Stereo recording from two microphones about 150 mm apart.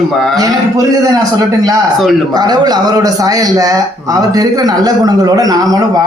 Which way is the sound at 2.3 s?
25° right (ahead or behind).